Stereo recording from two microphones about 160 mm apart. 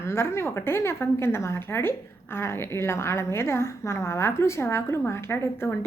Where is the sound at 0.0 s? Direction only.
15° left (ahead or behind).